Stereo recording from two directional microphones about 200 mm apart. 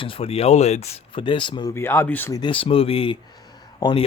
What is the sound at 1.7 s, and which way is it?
Speech, 10° left (ahead or behind).